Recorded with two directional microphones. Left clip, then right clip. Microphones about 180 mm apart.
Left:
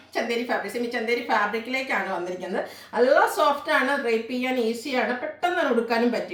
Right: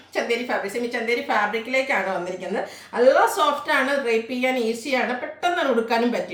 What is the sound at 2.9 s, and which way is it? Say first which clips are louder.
A woman's voice: right 2 dB; 15° right (ahead or behind).